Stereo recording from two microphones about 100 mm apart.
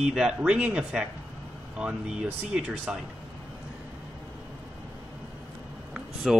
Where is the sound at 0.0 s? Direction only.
5° right (ahead or behind).